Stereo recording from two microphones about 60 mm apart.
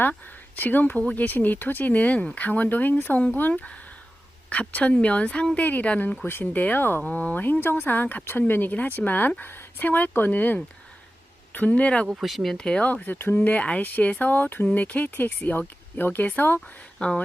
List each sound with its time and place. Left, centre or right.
0.0 s a woman's voice: left
7.0 s speech: left
12.0 s speech: centre
12.5 s speech: centre
12.9 s speech: left
13.4 s speech: left
16.6 s speech: centre